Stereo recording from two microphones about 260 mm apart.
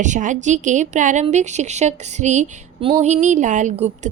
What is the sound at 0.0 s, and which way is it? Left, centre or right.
A woman's voice, right.